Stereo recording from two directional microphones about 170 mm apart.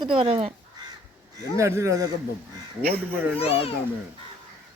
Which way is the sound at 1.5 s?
15° right (ahead or behind).